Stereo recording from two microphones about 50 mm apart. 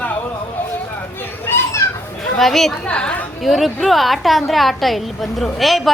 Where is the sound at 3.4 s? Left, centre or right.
Centre.